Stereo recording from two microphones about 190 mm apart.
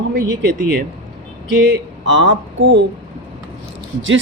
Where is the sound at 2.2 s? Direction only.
70° right (ahead or behind).